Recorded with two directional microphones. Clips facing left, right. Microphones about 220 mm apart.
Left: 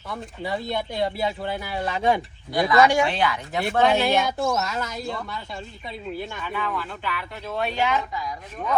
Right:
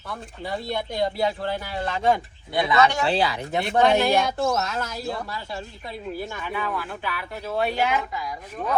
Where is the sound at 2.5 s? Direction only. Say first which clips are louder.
Left 2 dB; 25° right (ahead or behind).